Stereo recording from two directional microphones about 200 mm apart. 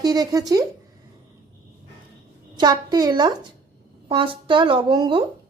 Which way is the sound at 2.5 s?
20° right (ahead or behind).